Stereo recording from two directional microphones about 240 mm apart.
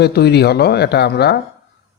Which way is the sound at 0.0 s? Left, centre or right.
Left.